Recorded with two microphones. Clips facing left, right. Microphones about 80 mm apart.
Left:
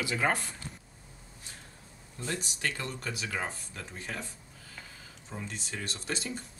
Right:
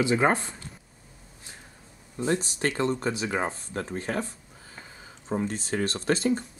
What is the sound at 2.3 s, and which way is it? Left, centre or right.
Speech, right.